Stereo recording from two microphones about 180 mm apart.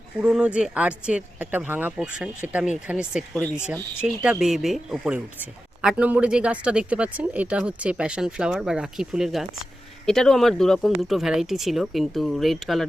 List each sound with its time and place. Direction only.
0.2 s speech: 5° right (ahead or behind)